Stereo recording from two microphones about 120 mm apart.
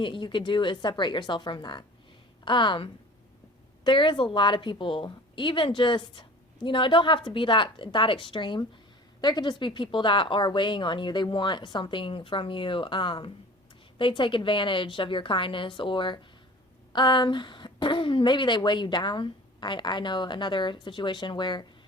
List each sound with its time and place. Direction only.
0.0 s a woman's voice: 45° left (ahead or behind)